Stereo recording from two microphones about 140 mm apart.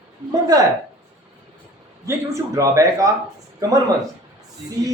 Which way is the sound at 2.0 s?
20° right (ahead or behind).